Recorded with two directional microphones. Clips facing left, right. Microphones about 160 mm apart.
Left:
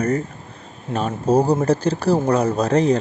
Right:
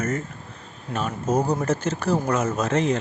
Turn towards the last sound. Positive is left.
turn(degrees=35)  # may be behind; listen again after turning